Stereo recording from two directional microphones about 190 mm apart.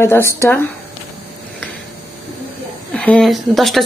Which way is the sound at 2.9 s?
5° left (ahead or behind).